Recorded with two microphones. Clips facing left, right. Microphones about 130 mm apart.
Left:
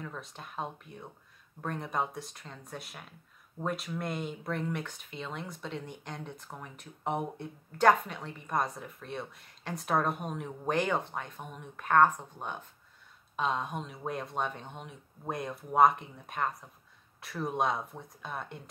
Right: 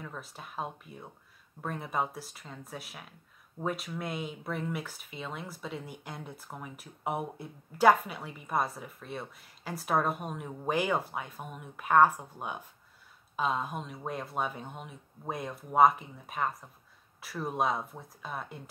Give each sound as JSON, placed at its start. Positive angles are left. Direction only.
{"t": 0.0, "sound": "speech", "side_deg": -5}